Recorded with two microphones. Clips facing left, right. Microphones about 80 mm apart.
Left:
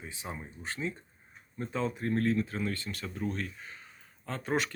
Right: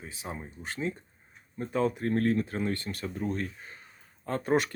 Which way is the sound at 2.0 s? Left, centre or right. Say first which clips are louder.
Right 2 dB; right.